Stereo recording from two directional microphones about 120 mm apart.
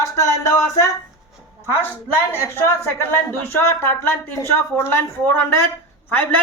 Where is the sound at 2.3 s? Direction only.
20° left (ahead or behind).